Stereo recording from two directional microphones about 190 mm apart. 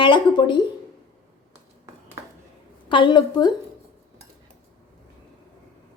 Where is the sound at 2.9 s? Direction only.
25° left (ahead or behind).